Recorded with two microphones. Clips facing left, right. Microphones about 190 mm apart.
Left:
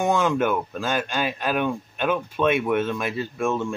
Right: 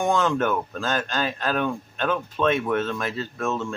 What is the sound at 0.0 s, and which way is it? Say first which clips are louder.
Speech: left 1 dB; 10° left (ahead or behind).